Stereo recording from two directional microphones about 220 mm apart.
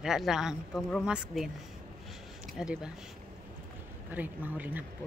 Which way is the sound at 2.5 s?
5° right (ahead or behind).